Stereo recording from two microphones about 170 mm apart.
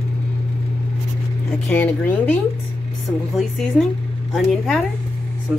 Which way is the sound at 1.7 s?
10° left (ahead or behind).